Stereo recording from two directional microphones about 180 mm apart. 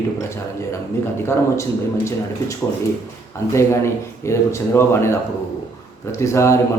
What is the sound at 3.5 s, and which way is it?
Speech, 15° left (ahead or behind).